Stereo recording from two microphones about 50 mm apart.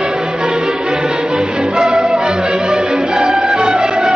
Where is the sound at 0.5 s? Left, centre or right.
Centre.